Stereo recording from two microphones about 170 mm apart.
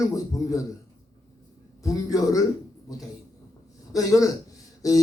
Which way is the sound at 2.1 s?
20° left (ahead or behind).